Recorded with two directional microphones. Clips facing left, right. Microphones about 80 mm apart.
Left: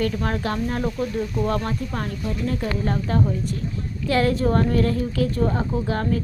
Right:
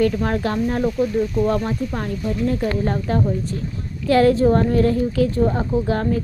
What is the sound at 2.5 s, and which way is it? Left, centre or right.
A woman's voice, right.